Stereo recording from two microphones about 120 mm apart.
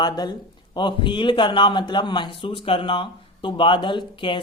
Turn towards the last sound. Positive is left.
turn(degrees=40)  # may be behind; listen again after turning